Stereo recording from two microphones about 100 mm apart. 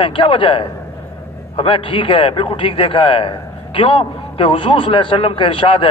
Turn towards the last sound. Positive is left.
turn(degrees=60)  # may be behind; listen again after turning